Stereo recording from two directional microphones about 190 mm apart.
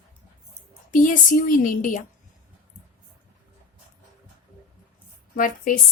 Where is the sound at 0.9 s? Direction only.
45° left (ahead or behind).